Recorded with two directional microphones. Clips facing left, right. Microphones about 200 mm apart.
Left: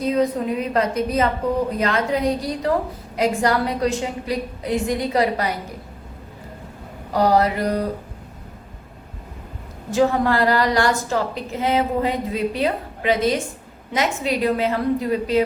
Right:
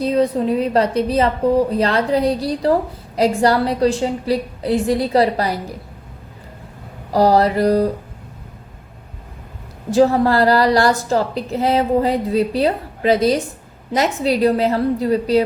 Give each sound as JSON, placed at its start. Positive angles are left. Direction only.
{"t": 0.0, "sound": "a woman's voice", "side_deg": -30}
{"t": 7.1, "sound": "a woman's voice", "side_deg": -35}
{"t": 9.9, "sound": "a woman's voice", "side_deg": -35}